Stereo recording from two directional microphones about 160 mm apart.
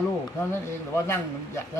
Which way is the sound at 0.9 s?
15° left (ahead or behind).